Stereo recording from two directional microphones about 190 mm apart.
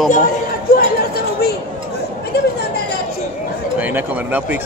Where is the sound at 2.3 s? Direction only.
60° left (ahead or behind).